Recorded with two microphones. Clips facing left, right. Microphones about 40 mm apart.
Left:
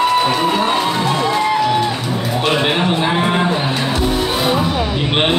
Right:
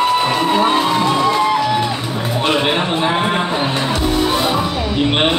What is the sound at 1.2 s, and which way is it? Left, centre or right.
Music, centre.